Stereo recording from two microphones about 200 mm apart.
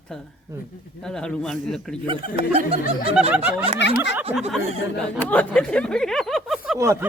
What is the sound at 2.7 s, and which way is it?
Snicker, 30° right (ahead or behind).